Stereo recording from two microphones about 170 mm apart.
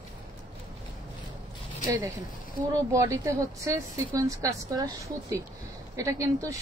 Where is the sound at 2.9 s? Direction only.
20° right (ahead or behind).